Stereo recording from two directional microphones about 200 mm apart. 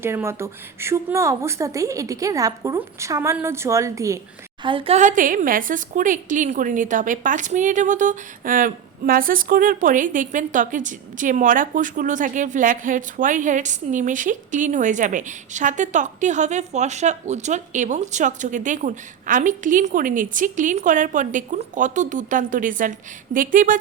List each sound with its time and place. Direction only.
0.0 s a woman's voice: 10° right (ahead or behind)
4.6 s a woman's voice: 25° right (ahead or behind); by 23.7 s 40° right (ahead or behind)